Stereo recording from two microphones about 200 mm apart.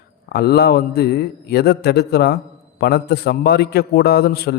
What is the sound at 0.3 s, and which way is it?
A man's voice, 55° left (ahead or behind).